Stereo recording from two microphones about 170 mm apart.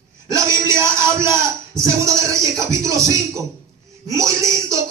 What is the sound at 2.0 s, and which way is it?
Music, 20° right (ahead or behind).